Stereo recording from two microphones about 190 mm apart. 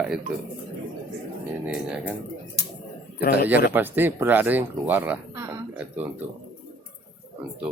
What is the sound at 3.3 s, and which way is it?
Speech, 10° right (ahead or behind).